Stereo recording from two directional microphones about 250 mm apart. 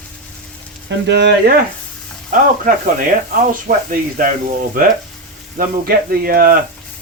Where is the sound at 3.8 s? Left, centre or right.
Right.